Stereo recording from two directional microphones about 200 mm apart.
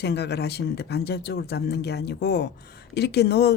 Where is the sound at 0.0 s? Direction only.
55° left (ahead or behind).